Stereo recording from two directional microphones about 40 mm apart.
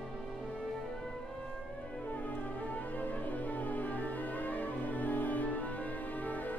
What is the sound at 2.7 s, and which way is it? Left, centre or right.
Music, left.